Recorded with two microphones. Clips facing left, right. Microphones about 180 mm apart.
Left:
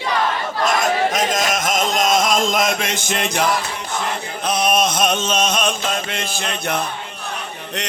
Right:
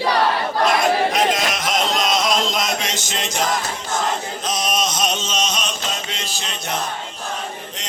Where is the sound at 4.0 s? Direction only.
60° left (ahead or behind).